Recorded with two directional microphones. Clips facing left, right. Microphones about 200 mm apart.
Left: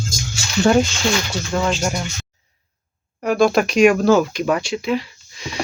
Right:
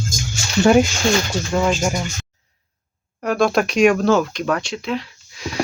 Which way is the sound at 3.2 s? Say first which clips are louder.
Left 2 dB; centre (ahead or behind).